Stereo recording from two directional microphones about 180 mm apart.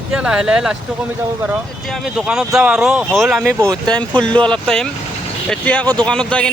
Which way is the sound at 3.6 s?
15° right (ahead or behind).